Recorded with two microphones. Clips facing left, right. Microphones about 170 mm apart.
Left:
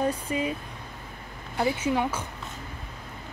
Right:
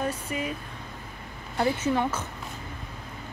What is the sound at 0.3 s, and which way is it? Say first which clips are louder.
Speech: left 3 dB; 25° left (ahead or behind).